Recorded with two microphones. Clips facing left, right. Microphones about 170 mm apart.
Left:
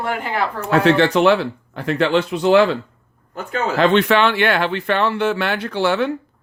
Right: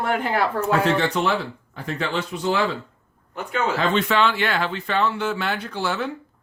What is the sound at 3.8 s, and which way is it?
Speech, 70° left (ahead or behind).